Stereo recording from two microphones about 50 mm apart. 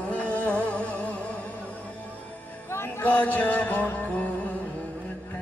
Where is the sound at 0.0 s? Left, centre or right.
Left.